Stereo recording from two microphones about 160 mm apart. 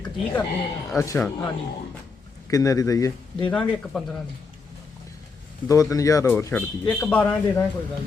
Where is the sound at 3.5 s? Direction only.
5° left (ahead or behind).